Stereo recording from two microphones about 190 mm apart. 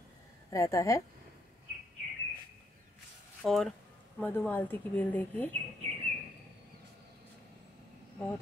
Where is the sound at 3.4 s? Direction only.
Centre (ahead or behind).